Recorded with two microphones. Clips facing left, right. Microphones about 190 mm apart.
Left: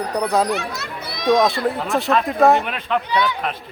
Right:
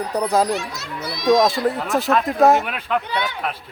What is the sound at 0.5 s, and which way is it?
Speech, 60° left (ahead or behind).